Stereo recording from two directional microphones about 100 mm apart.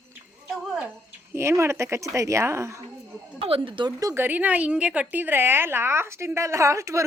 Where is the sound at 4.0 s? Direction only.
35° right (ahead or behind).